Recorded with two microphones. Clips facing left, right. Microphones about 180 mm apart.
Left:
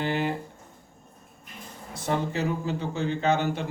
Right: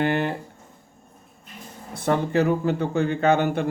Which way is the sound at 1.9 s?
60° right (ahead or behind).